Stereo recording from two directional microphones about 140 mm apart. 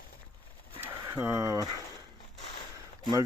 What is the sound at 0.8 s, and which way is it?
Speech, 20° right (ahead or behind).